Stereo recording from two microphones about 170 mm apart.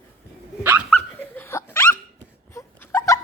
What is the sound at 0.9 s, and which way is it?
Dog, 10° left (ahead or behind).